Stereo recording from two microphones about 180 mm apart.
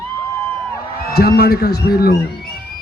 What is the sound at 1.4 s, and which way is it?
Speech, 60° left (ahead or behind).